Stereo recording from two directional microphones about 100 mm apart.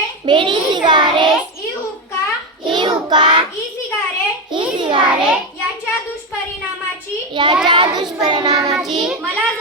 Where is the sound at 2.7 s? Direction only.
50° right (ahead or behind).